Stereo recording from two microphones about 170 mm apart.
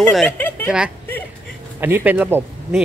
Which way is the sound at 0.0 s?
5° left (ahead or behind).